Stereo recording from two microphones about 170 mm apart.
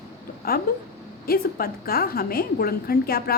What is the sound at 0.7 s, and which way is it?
A woman's voice, 60° left (ahead or behind).